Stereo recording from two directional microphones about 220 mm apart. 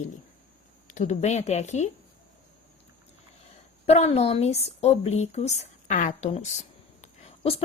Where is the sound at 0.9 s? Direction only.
35° left (ahead or behind).